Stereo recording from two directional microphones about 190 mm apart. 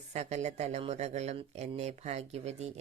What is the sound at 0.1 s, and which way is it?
Speech, 35° right (ahead or behind).